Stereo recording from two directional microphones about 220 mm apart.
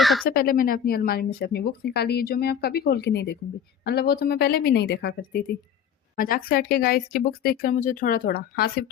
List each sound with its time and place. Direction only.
0.0 s speech: centre (ahead or behind)
0.3 s speech: 40° left (ahead or behind)